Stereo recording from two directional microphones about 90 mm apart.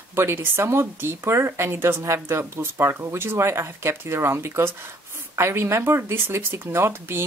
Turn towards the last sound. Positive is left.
turn(degrees=-25)  # may be behind; listen again after turning